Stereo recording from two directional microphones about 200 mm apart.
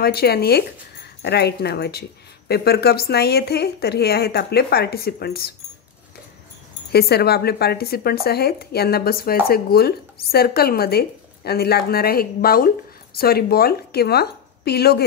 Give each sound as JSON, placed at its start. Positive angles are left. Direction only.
{"t": 0.0, "sound": "speech", "side_deg": 50}
{"t": 6.9, "sound": "speech", "side_deg": 55}